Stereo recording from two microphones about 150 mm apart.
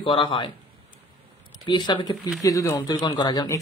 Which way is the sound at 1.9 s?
30° left (ahead or behind).